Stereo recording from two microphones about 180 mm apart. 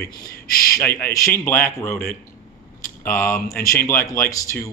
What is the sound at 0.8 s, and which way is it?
Speech, 15° left (ahead or behind).